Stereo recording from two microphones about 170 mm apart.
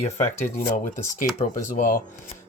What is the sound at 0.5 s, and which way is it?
Speech, 50° left (ahead or behind).